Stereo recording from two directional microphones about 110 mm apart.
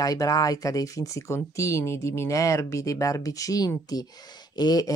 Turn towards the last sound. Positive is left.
turn(degrees=35)  # may be behind; listen again after turning